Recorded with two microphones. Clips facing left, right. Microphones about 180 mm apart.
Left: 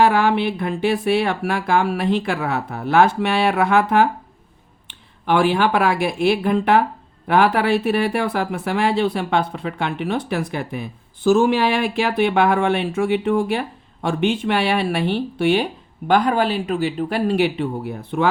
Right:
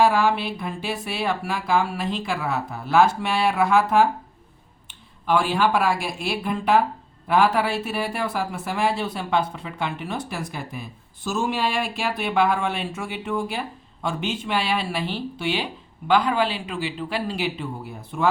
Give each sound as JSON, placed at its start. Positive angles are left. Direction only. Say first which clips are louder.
{"t": 0.0, "sound": "speech", "louder": "left 3 dB", "side_deg": 60}